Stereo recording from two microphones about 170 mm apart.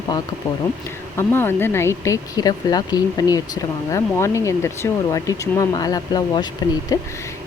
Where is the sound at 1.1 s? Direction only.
15° left (ahead or behind).